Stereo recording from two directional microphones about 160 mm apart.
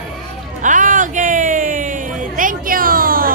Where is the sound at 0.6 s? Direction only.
55° right (ahead or behind).